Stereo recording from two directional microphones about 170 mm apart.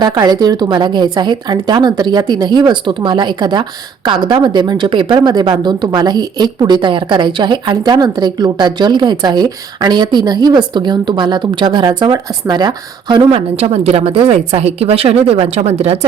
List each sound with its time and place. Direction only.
0.0 s a woman's voice: 25° right (ahead or behind); by 16.0 s 40° right (ahead or behind)